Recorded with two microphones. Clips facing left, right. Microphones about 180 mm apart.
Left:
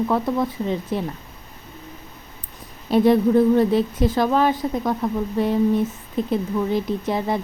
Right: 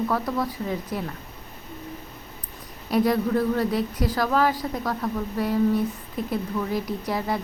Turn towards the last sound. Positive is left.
turn(degrees=20)  # may be behind; listen again after turning